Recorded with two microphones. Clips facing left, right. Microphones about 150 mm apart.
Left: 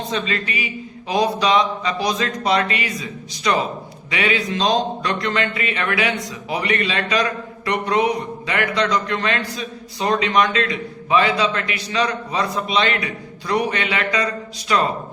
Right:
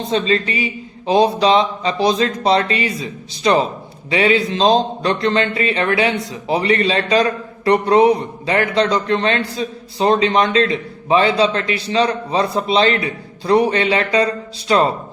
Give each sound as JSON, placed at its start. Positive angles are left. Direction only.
{"t": 0.1, "sound": "speech", "side_deg": -30}